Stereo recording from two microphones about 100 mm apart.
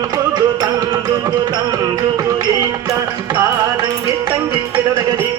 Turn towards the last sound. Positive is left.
turn(degrees=-35)  # may be behind; listen again after turning